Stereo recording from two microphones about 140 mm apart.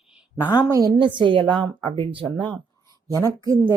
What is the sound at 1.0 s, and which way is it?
Speech, 35° right (ahead or behind).